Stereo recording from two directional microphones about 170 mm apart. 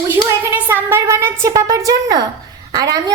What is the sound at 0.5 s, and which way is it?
Speech, 15° right (ahead or behind).